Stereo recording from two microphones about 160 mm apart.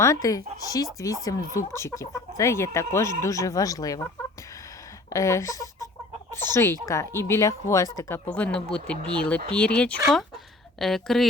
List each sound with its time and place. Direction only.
0.0 s speech: 20° left (ahead or behind)
5.1 s speech: 20° left (ahead or behind)
8.3 s speech: 10° left (ahead or behind)